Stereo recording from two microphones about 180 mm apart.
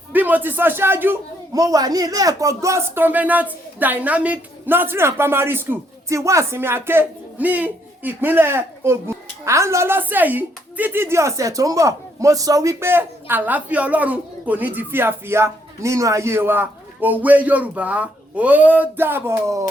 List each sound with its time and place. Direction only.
0.1 s a man's voice: 10° right (ahead or behind)